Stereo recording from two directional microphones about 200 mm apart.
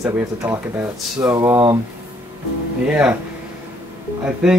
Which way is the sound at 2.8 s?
5° right (ahead or behind).